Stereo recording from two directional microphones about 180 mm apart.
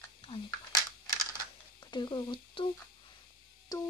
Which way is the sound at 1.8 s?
25° left (ahead or behind).